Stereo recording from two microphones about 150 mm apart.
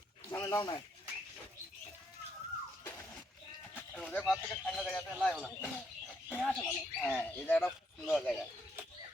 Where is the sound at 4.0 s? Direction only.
5° left (ahead or behind).